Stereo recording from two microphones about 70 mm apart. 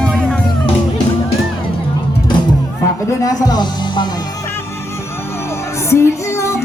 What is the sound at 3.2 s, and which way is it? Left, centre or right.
Music, left.